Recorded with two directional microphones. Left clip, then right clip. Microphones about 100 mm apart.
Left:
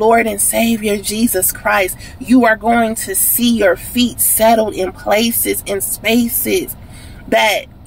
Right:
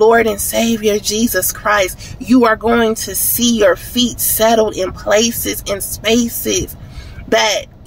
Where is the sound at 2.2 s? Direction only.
40° right (ahead or behind).